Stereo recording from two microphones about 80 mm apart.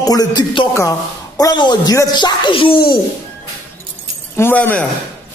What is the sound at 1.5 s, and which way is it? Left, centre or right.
Speech, left.